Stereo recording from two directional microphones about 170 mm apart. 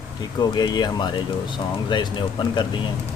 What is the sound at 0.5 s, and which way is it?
Speech, 25° left (ahead or behind).